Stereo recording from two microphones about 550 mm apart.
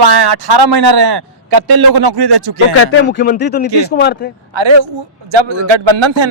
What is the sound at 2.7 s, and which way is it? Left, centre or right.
Speech, left.